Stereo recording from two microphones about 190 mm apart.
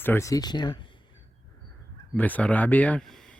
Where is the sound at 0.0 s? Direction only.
15° left (ahead or behind).